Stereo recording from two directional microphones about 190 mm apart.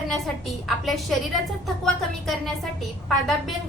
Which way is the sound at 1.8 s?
Centre (ahead or behind).